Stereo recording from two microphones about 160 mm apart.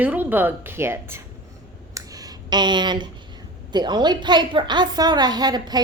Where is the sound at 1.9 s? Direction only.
20° right (ahead or behind).